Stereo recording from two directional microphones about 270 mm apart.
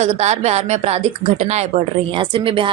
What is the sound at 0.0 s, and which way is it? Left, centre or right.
A woman's voice, right.